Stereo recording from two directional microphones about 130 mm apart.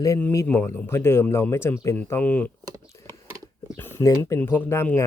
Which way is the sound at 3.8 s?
20° left (ahead or behind).